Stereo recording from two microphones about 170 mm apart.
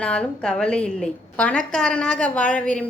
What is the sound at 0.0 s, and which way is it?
A woman's voice, 5° left (ahead or behind).